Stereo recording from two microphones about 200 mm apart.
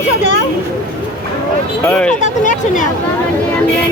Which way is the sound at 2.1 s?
35° left (ahead or behind).